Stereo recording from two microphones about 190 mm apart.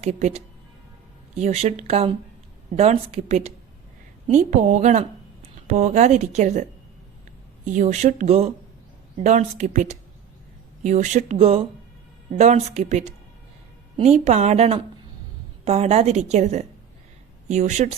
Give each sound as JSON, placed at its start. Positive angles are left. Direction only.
{"t": 0.0, "sound": "a woman's voice", "side_deg": -35}